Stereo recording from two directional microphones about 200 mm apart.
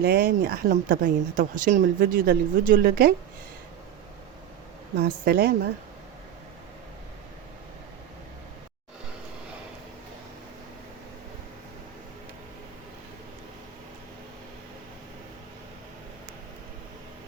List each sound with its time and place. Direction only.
0.0 s speech: 50° right (ahead or behind)
4.9 s speech: 50° right (ahead or behind)